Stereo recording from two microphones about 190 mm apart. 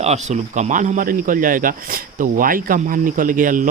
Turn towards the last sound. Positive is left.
turn(degrees=-45)  # may be behind; listen again after turning